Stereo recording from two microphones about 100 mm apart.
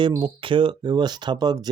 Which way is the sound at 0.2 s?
55° right (ahead or behind).